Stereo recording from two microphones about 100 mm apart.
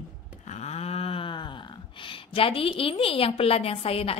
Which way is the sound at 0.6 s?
90° left.